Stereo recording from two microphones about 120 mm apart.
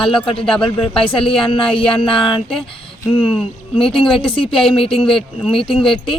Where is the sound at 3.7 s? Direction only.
45° left (ahead or behind).